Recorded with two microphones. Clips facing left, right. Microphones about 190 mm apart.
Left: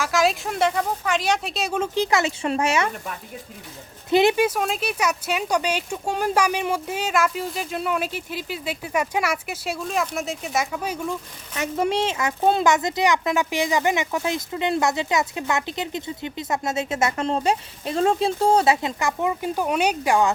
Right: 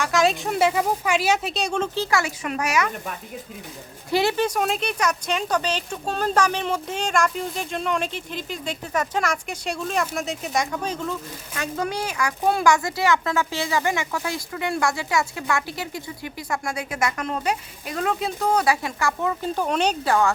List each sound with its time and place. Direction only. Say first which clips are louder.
0.0 s speech: right 1 dB; centre (ahead or behind)
2.0 s speech: left 3 dB; 20° left (ahead or behind)
4.1 s speech: left 4 dB; 20° left (ahead or behind)
4.4 s speech: even; centre (ahead or behind)